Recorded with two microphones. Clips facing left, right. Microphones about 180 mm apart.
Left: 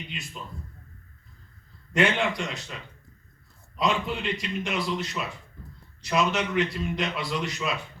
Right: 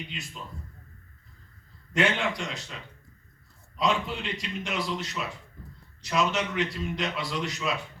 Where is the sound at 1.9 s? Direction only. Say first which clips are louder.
Left 2 dB; 55° left (ahead or behind).